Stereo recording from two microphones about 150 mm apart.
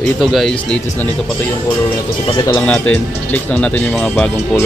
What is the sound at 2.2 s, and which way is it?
Speech, 30° left (ahead or behind).